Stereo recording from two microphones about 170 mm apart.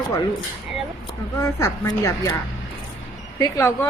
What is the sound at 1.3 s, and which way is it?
Hammer, 20° left (ahead or behind).